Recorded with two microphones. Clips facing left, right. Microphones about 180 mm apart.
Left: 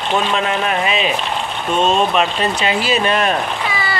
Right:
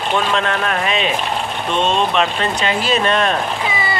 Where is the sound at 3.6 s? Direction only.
20° right (ahead or behind).